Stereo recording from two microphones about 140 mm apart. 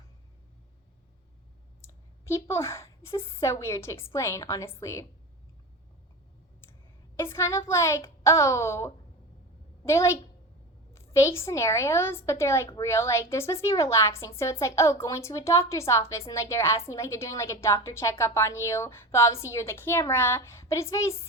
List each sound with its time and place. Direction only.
1.8 s a woman's voice: 20° left (ahead or behind)
7.2 s a woman's voice: 20° left (ahead or behind)